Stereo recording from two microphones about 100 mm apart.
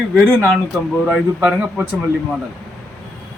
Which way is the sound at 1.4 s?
10° right (ahead or behind).